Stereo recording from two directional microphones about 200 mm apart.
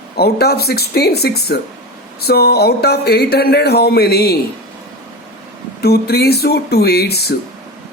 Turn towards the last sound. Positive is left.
turn(degrees=55)  # may be behind; listen again after turning